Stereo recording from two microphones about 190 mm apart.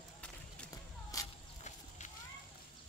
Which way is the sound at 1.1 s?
20° left (ahead or behind).